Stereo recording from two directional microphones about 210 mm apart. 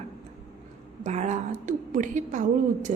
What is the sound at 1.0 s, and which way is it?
A woman's voice, 35° right (ahead or behind).